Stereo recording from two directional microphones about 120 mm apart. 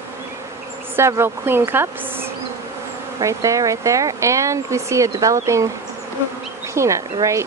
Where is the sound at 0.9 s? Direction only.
20° right (ahead or behind).